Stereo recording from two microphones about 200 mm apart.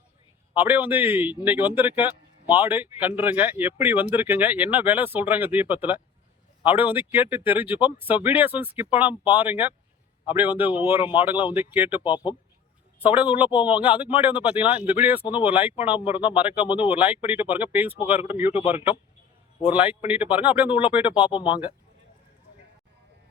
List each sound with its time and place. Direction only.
0.6 s speech: 10° right (ahead or behind)
12.1 s speech: 20° left (ahead or behind)
13.1 s speech: 10° right (ahead or behind)
21.2 s speech: 25° left (ahead or behind)